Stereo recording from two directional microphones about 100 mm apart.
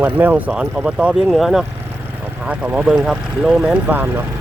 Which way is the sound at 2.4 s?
15° right (ahead or behind).